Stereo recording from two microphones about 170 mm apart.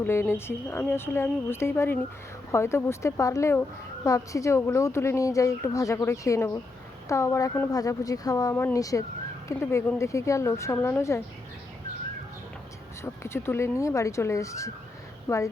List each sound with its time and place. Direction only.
0.0 s a woman's voice: 15° left (ahead or behind)
13.0 s a woman's voice: 15° left (ahead or behind)